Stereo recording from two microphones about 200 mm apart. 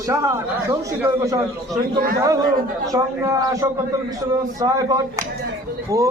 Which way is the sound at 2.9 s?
15° right (ahead or behind).